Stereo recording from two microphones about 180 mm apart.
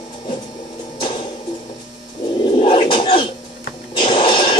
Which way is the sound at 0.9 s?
30° left (ahead or behind).